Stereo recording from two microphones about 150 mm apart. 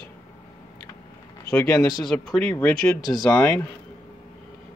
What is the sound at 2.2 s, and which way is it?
Speech, 5° left (ahead or behind).